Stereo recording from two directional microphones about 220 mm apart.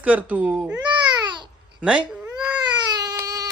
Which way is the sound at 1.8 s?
5° right (ahead or behind).